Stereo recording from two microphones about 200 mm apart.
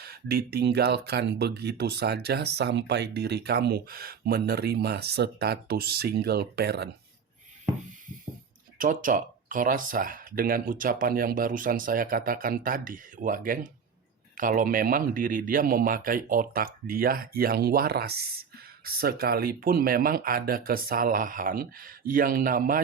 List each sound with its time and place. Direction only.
0.0 s speech: 50° right (ahead or behind)
8.8 s speech: 40° right (ahead or behind)